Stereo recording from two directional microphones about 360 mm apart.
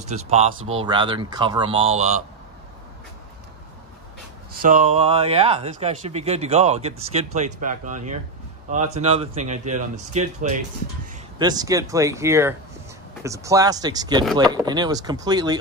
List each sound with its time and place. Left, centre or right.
0.0 s speech: centre
4.6 s speech: right